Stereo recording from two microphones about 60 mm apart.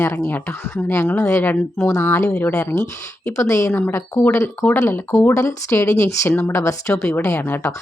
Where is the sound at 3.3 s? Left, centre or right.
Left.